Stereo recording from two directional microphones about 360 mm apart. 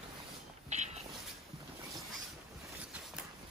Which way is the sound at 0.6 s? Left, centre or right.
Centre.